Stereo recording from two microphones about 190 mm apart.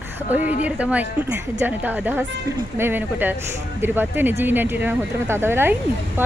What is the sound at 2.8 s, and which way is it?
Speech, 10° right (ahead or behind).